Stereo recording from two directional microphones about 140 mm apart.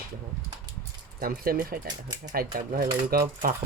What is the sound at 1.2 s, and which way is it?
Speech, 90° right.